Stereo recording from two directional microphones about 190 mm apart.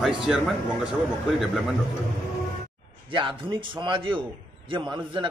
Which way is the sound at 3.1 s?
25° right (ahead or behind).